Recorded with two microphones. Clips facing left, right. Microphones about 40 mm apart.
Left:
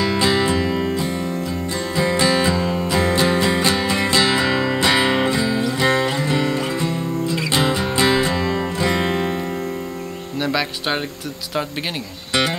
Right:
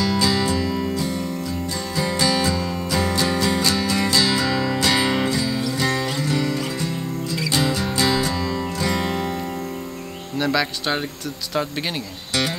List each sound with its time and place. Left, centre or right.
0.0 s music: left
10.4 s music: centre